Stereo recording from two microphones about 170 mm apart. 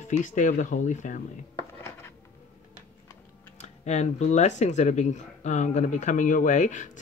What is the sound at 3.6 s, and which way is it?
Speech, 40° left (ahead or behind).